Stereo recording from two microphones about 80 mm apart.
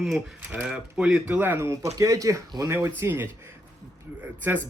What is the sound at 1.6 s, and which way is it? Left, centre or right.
Speech, right.